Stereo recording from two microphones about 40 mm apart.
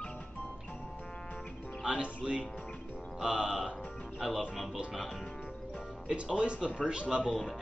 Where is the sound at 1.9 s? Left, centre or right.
Right.